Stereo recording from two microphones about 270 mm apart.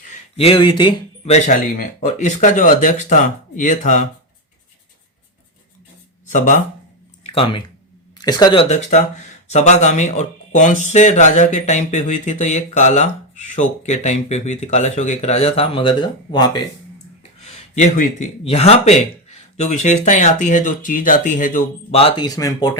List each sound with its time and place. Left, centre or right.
0.1 s a man's voice: left
6.2 s speech: left
17.4 s speech: left